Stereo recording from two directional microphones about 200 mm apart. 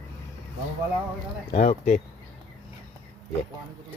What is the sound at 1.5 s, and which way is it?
Speech, 35° left (ahead or behind).